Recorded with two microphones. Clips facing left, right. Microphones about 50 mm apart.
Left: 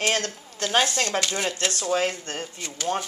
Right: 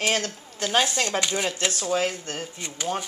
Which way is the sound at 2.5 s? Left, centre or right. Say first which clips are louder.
Even; right.